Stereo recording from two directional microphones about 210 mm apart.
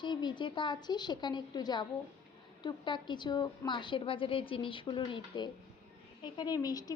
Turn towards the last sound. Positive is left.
turn(degrees=15)  # may be behind; listen again after turning